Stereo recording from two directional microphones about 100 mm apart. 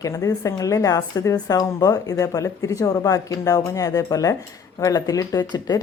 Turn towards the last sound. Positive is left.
turn(degrees=45)  # may be behind; listen again after turning